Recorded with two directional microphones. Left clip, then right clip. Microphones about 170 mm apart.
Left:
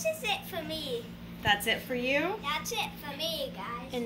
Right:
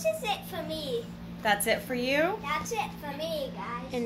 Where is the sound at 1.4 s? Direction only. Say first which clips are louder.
Right 1 dB; 35° right (ahead or behind).